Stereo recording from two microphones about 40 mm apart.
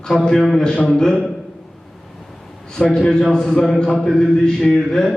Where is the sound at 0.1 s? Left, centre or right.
Centre.